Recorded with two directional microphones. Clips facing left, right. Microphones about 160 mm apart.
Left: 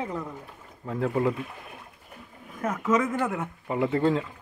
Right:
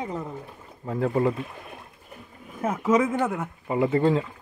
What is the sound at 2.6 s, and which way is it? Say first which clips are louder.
Speech: right 3 dB; 30° right (ahead or behind).